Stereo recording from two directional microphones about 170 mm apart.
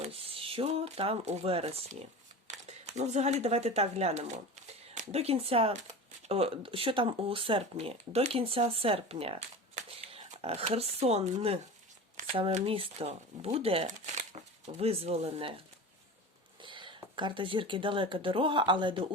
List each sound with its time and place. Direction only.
0.0 s speech: 35° right (ahead or behind)
16.6 s speech: 30° right (ahead or behind)